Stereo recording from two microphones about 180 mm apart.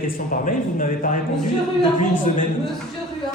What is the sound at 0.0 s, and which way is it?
Speech, 50° left (ahead or behind).